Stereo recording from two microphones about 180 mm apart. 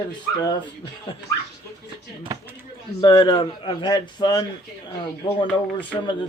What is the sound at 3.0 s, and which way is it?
Speech, 25° left (ahead or behind).